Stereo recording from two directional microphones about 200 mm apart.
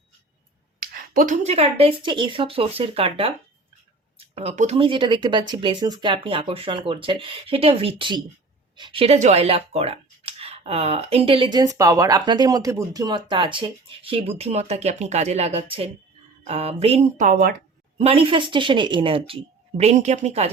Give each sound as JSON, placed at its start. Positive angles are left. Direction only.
{"t": 0.8, "sound": "speech", "side_deg": -45}
{"t": 17.9, "sound": "speech", "side_deg": -30}